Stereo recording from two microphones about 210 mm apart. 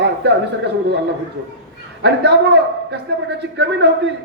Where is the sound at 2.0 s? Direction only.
55° right (ahead or behind).